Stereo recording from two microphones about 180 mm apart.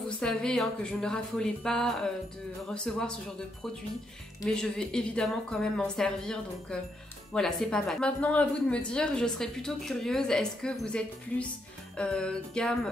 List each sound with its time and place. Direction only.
0.2 s speech: 5° left (ahead or behind)
4.5 s speech: 5° left (ahead or behind)